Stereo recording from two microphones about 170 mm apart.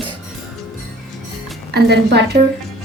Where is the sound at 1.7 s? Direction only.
80° right.